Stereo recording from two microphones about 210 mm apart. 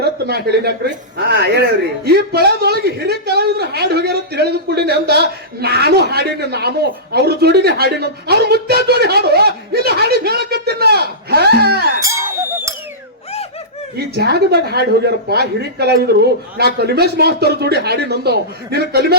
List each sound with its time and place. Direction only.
0.0 s speech: 50° right (ahead or behind)
12.0 s a sound: 10° right (ahead or behind)
13.9 s speech: 50° right (ahead or behind)